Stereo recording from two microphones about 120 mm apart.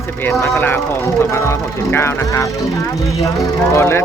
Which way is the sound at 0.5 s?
20° left (ahead or behind).